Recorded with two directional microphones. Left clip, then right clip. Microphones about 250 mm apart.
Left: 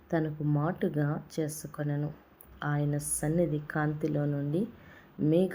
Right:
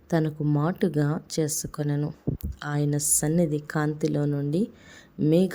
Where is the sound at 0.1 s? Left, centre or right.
Right.